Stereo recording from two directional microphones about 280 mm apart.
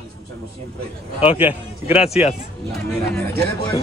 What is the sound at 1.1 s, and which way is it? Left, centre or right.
Speech, centre.